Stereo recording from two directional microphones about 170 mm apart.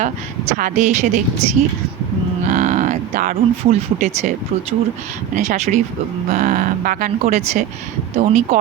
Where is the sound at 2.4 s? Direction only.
45° right (ahead or behind).